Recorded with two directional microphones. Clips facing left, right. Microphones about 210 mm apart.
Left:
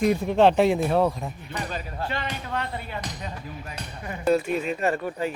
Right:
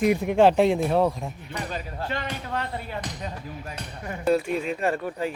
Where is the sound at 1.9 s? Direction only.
45° right (ahead or behind).